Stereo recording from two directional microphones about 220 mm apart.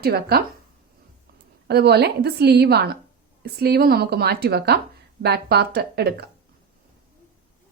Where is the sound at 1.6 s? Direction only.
50° right (ahead or behind).